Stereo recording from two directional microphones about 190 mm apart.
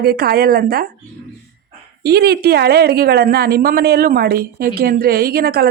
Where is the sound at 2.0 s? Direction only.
55° right (ahead or behind).